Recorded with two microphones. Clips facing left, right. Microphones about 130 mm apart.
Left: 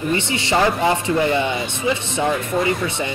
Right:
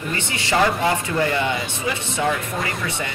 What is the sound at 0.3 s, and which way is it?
Speech, 25° left (ahead or behind).